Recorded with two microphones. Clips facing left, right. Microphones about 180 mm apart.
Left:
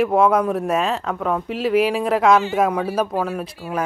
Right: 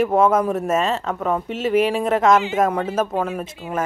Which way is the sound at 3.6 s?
20° right (ahead or behind).